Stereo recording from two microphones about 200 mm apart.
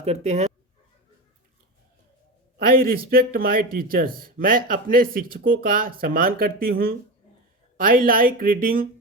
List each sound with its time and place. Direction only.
0.0 s speech: 35° right (ahead or behind)
2.6 s speech: 50° right (ahead or behind)